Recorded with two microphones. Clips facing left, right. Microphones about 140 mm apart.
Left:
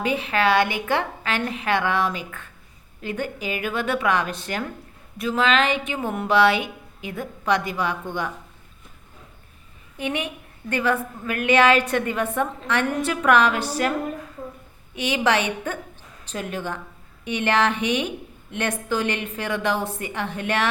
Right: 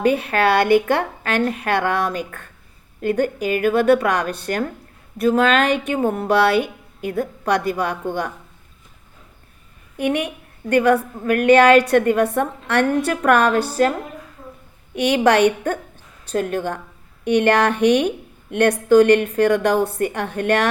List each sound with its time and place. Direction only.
0.0 s a woman's voice: 55° right (ahead or behind)
10.0 s a woman's voice: 55° right (ahead or behind)
14.9 s a woman's voice: 55° right (ahead or behind)